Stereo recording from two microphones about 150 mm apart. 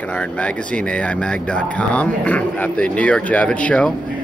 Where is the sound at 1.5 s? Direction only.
10° left (ahead or behind).